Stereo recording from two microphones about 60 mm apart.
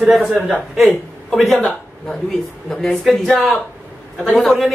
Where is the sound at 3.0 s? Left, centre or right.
Centre.